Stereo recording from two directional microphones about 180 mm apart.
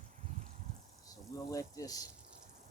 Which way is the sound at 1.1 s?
20° left (ahead or behind).